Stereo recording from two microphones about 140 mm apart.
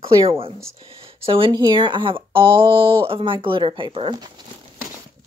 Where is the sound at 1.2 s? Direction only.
40° right (ahead or behind).